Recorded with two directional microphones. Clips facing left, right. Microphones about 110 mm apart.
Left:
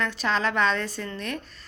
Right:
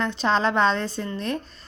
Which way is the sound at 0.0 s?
30° right (ahead or behind).